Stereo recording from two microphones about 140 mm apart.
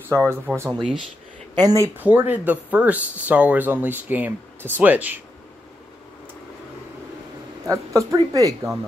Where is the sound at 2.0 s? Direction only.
15° right (ahead or behind).